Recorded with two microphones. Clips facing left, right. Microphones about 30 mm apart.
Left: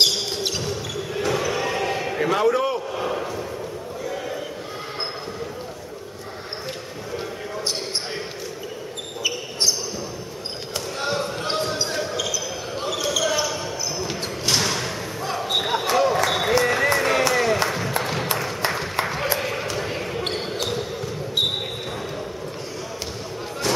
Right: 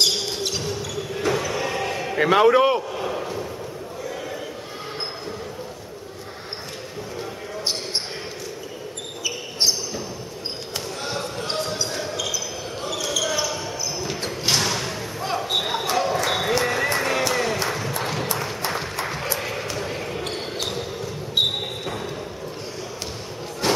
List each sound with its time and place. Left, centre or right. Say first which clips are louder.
0.0 s basketball bounce: left 1 dB; centre
2.1 s a man's voice: right 5 dB; right
2.9 s a sound: left 1 dB; centre
11.1 s basketball bounce: even; centre
14.5 s a sound: even; centre
15.4 s basketball bounce: left 4 dB; centre
16.3 s a sound: left 2 dB; centre
19.3 s basketball bounce: left 2 dB; centre
21.4 s basketball bounce: right 2 dB; centre